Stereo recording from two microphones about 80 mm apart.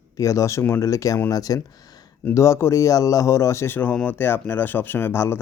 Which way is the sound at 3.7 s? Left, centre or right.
Left.